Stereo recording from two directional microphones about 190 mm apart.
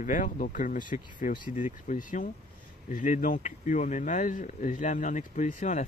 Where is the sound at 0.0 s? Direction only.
45° left (ahead or behind).